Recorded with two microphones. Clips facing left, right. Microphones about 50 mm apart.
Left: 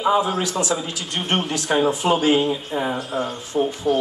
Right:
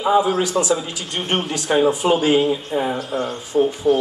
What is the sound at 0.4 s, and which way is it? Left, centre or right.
Speech, centre.